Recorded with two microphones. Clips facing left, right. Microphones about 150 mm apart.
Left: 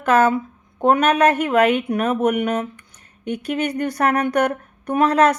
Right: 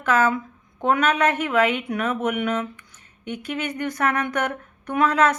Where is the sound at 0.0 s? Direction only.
35° left (ahead or behind).